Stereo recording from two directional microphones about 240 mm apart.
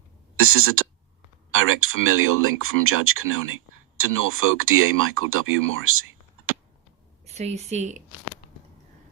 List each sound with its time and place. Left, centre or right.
0.3 s speech: right
7.3 s speech: right